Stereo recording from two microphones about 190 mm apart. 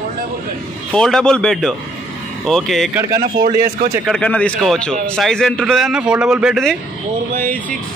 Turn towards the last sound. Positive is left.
turn(degrees=0)  # may be behind; listen again after turning